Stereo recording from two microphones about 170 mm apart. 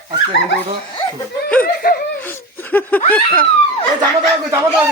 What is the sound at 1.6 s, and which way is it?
Speech, 60° left (ahead or behind).